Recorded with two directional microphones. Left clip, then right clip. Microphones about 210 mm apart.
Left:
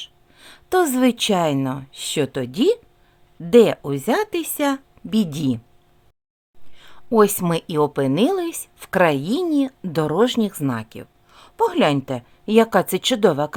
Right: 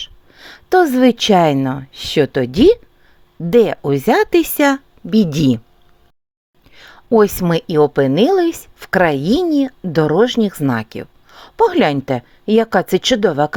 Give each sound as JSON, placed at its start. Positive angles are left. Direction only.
{"t": 0.3, "sound": "a woman's voice", "side_deg": -25}
{"t": 5.0, "sound": "speech", "side_deg": -15}
{"t": 6.7, "sound": "a sound", "side_deg": -25}
{"t": 7.5, "sound": "speech", "side_deg": -15}